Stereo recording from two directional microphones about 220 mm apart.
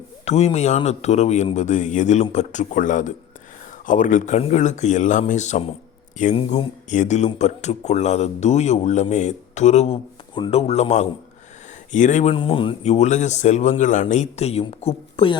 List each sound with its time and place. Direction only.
0.3 s speech: 30° left (ahead or behind)